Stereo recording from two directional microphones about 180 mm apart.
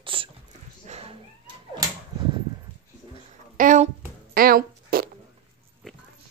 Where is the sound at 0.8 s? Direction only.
35° right (ahead or behind).